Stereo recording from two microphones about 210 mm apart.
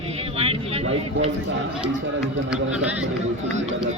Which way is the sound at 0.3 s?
30° right (ahead or behind).